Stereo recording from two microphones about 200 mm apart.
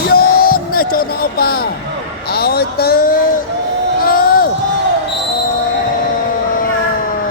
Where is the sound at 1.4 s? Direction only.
50° left (ahead or behind).